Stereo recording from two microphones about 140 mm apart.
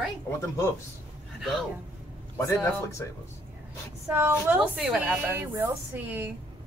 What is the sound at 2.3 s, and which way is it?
Speech, 20° left (ahead or behind).